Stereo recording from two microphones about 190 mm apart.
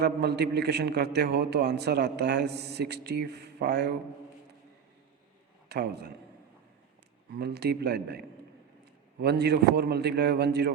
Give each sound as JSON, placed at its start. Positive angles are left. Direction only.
{"t": 0.0, "sound": "a man's voice", "side_deg": -60}
{"t": 5.6, "sound": "a man's voice", "side_deg": -60}
{"t": 7.3, "sound": "a man's voice", "side_deg": -60}